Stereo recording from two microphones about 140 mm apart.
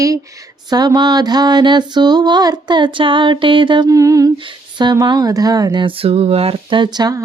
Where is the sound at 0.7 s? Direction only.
30° right (ahead or behind).